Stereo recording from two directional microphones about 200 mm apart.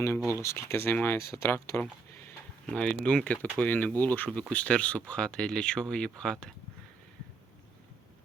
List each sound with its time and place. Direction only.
0.3 s speech: 15° left (ahead or behind)